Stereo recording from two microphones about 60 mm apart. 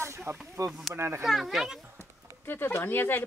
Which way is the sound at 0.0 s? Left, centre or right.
Right.